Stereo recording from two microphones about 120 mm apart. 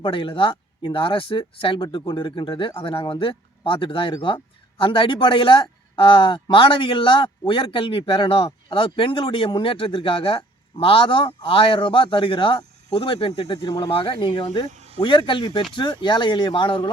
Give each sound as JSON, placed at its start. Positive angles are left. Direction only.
{"t": 0.0, "sound": "speech", "side_deg": 45}
{"t": 14.7, "sound": "a sound", "side_deg": -65}
{"t": 15.7, "sound": "speech", "side_deg": 40}